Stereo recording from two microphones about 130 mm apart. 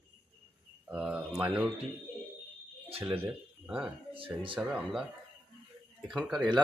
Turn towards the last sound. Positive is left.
turn(degrees=0)  # may be behind; listen again after turning